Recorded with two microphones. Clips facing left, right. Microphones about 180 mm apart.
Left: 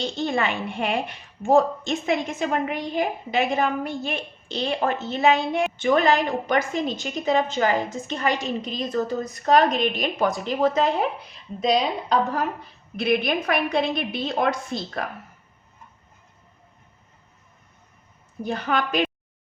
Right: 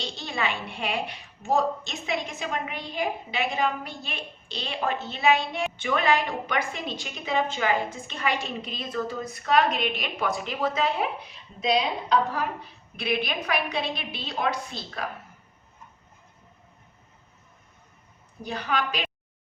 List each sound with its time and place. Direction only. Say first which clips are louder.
0.0 s a woman's voice: left 6 dB; 50° left (ahead or behind)
18.4 s a woman's voice: left 4 dB; 50° left (ahead or behind)